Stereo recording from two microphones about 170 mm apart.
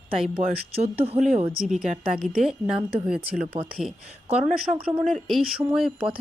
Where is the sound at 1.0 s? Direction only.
40° right (ahead or behind).